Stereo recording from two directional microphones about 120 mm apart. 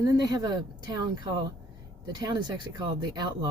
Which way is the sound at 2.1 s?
35° right (ahead or behind).